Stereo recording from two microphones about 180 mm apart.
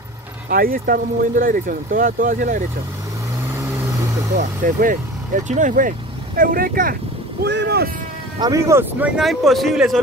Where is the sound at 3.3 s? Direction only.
15° right (ahead or behind).